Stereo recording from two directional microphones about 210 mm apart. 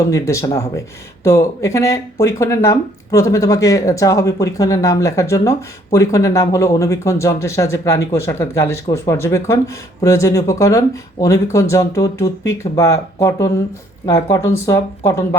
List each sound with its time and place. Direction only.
0.1 s speech: 15° left (ahead or behind)